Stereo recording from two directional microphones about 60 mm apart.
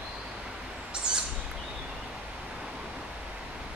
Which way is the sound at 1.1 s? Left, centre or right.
Centre.